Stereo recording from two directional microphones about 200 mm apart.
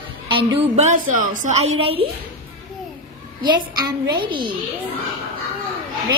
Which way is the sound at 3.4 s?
20° right (ahead or behind).